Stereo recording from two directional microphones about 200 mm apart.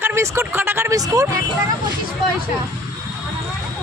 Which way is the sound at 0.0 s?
15° right (ahead or behind).